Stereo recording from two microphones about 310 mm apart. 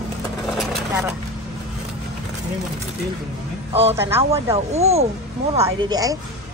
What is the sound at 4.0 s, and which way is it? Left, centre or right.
Speech, centre.